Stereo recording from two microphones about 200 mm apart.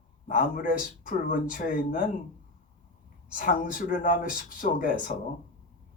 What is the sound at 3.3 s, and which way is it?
Speech, 40° left (ahead or behind).